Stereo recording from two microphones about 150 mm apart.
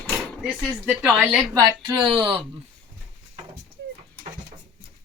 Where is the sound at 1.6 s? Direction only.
25° right (ahead or behind).